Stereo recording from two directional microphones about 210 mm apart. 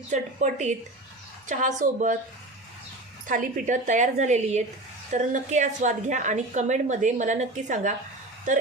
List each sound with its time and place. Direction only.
0.1 s a woman's voice: 35° right (ahead or behind)
3.2 s a woman's voice: 40° right (ahead or behind)